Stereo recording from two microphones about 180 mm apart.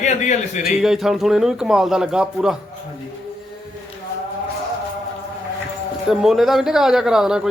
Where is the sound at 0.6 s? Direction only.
Centre (ahead or behind).